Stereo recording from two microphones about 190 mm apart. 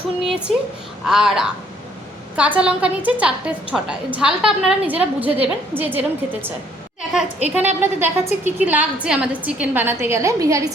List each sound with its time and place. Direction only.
0.2 s a woman's voice: 5° right (ahead or behind)